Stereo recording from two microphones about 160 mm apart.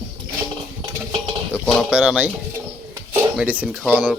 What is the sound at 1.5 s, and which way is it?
Speech, centre (ahead or behind).